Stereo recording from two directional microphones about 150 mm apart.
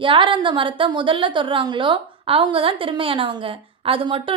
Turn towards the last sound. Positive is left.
turn(degrees=-35)  # may be behind; listen again after turning